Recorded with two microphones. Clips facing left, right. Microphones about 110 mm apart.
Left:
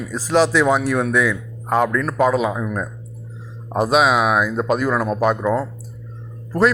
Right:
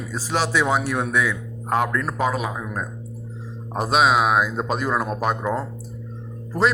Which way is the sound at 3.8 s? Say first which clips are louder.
Left 2 dB; 10° left (ahead or behind).